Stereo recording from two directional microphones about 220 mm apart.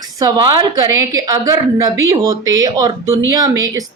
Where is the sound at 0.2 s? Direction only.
20° right (ahead or behind).